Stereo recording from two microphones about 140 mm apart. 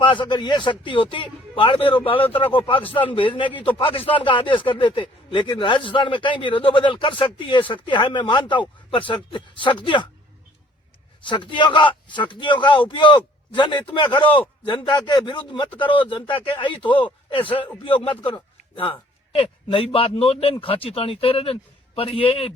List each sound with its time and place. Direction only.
0.0 s speech: 35° left (ahead or behind)
11.3 s speech: 35° left (ahead or behind)